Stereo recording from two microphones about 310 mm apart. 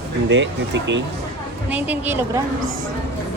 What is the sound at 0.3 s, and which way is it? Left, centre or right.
Speech, right.